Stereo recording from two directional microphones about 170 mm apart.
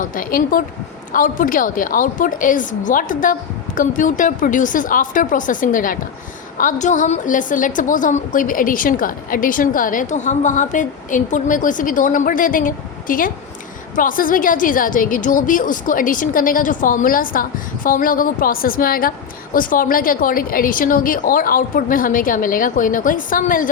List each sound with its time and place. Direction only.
0.0 s a woman's voice: 55° left (ahead or behind)